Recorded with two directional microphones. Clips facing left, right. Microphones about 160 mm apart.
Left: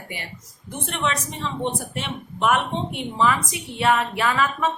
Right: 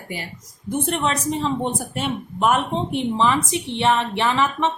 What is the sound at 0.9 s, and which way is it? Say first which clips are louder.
A woman's voice: right 2 dB; 35° right (ahead or behind).